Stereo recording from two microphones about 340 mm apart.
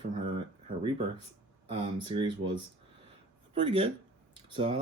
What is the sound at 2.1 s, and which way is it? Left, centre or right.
Speech, centre.